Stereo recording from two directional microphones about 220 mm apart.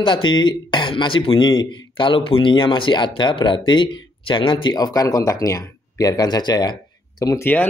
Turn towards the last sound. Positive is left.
turn(degrees=10)  # may be behind; listen again after turning